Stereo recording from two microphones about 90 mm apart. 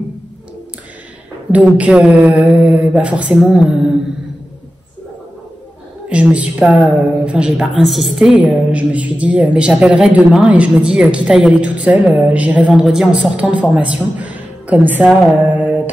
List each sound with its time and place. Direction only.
1.5 s a woman's voice: 15° right (ahead or behind)
6.0 s a woman's voice: 15° right (ahead or behind)
15.5 s mantra: 15° right (ahead or behind)